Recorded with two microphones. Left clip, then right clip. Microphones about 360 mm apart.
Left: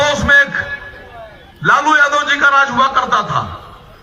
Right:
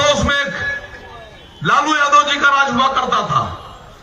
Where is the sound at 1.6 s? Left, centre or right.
Centre.